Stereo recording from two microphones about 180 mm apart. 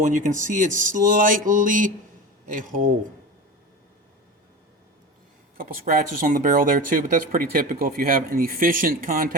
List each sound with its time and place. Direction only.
0.0 s speech: 45° right (ahead or behind)
5.5 s speech: 50° right (ahead or behind)